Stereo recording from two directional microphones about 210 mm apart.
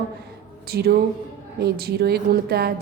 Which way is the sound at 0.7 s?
45° right (ahead or behind).